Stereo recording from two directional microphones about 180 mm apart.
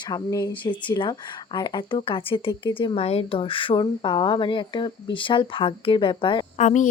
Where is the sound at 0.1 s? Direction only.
20° left (ahead or behind).